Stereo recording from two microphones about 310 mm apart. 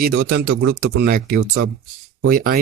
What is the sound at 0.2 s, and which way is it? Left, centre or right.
Speech, right.